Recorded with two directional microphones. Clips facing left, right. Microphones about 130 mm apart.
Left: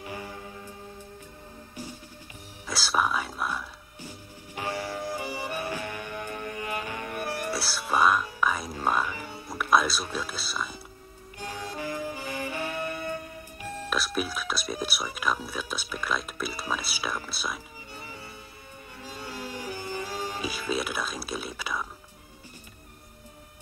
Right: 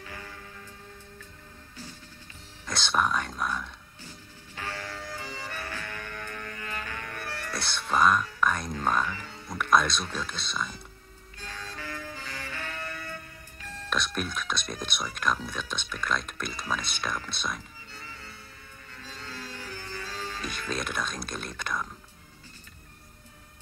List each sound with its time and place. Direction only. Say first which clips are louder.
0.0 s music: left 5 dB; 20° left (ahead or behind)
2.6 s speech: even; 5° left (ahead or behind)
4.6 s music: left 6 dB; 15° left (ahead or behind)
13.9 s speech: left 1 dB; 5° left (ahead or behind)
18.0 s music: left 3 dB; 15° left (ahead or behind)